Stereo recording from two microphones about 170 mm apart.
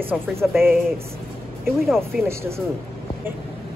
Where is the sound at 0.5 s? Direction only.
Centre (ahead or behind).